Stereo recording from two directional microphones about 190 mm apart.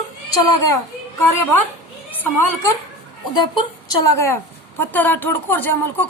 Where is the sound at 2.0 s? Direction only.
10° left (ahead or behind).